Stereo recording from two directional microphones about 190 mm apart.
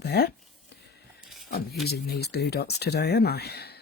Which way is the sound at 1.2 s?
Centre (ahead or behind).